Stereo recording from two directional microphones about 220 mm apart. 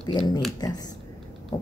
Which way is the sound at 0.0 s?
20° left (ahead or behind).